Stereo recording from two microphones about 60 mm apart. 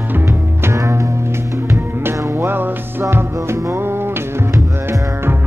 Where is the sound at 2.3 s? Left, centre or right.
Right.